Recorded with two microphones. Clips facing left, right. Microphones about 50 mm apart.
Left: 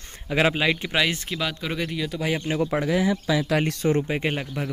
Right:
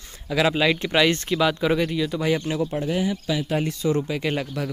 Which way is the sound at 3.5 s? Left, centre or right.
Left.